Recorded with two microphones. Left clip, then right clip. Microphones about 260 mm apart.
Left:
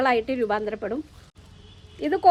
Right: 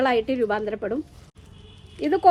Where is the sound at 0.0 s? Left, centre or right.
Left.